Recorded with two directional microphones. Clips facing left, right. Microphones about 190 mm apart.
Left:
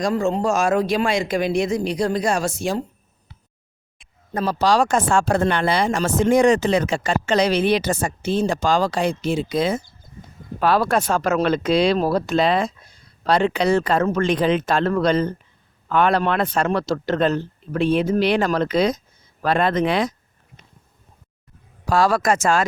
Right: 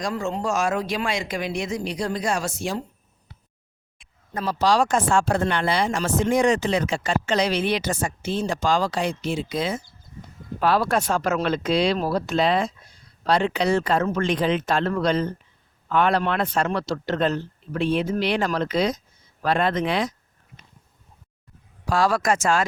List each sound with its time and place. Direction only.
0.0 s speech: 40° left (ahead or behind)
2.4 s speech: 30° left (ahead or behind)
4.4 s speech: 45° left (ahead or behind)
10.6 s speech: 55° left (ahead or behind)
21.8 s speech: 40° left (ahead or behind)